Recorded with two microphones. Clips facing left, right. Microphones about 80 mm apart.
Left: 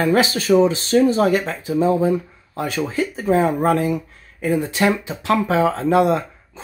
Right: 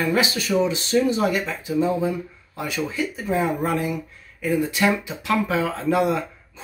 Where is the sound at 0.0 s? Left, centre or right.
Left.